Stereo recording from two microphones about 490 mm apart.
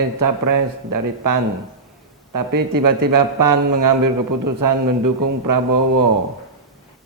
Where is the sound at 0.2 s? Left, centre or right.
Right.